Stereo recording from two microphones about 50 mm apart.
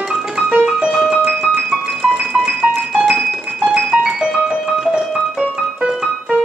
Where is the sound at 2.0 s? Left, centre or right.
Centre.